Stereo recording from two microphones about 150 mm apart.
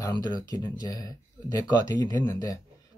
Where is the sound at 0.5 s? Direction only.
25° left (ahead or behind).